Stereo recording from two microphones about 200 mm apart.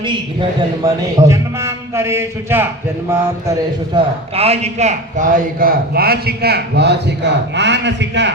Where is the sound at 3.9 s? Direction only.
30° right (ahead or behind).